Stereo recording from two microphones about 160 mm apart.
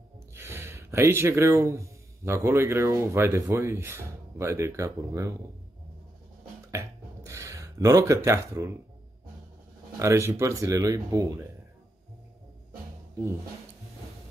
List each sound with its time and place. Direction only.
0.3 s speech: 15° right (ahead or behind)
6.7 s a sound: 20° right (ahead or behind)
9.9 s speech: 20° right (ahead or behind)